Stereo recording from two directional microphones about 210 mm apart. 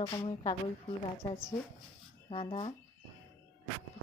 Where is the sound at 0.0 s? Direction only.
25° left (ahead or behind).